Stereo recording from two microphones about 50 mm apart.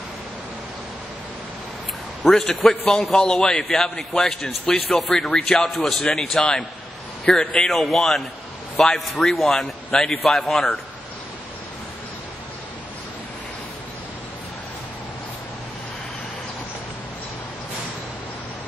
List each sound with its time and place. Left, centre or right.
2.2 s speech: centre